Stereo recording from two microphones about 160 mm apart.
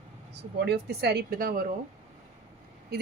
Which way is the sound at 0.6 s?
90° right.